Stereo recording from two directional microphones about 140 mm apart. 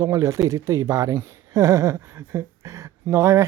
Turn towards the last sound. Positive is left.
turn(degrees=-20)  # may be behind; listen again after turning